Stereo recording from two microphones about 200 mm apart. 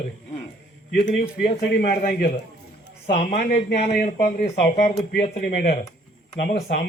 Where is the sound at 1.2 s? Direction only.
55° left (ahead or behind).